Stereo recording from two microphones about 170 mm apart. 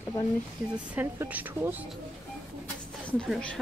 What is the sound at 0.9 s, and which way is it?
Speech, 10° right (ahead or behind).